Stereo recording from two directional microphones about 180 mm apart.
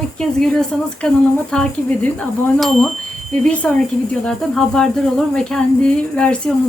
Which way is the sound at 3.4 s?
5° left (ahead or behind).